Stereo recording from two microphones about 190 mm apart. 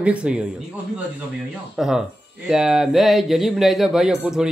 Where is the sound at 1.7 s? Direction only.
Centre (ahead or behind).